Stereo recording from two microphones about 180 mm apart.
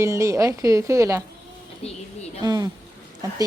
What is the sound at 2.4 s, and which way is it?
Speech, 20° right (ahead or behind).